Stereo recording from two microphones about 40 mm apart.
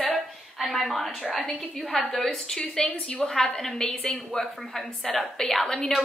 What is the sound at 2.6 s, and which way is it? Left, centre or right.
Speech, left.